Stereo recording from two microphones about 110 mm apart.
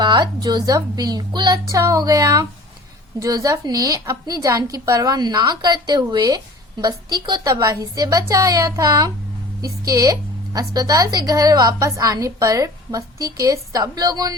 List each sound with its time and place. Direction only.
0.0 s a woman's voice: 45° right (ahead or behind)